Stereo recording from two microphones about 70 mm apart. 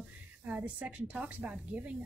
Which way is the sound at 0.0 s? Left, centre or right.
Right.